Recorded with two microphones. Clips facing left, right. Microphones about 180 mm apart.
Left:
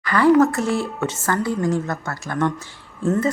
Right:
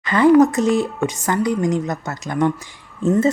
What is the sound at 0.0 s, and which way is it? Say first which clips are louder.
Speech: right 3 dB; 20° right (ahead or behind).